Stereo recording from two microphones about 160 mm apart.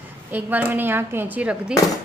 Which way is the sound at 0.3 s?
10° right (ahead or behind).